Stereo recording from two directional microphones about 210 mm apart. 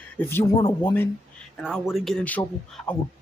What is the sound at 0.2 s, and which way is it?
Speech, 10° left (ahead or behind).